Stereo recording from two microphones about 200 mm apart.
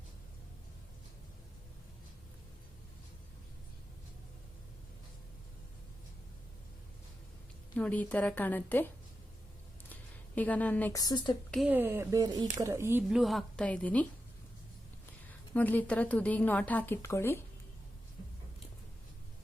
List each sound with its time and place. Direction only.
7.8 s a woman's voice: 5° left (ahead or behind)
9.9 s a sound: 5° left (ahead or behind)
11.0 s speech: 20° left (ahead or behind)
11.5 s speech: 5° right (ahead or behind)
13.1 s a woman's voice: centre (ahead or behind)
15.5 s a woman's voice: 10° left (ahead or behind)